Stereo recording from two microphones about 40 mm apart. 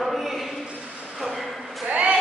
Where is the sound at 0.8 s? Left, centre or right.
Centre.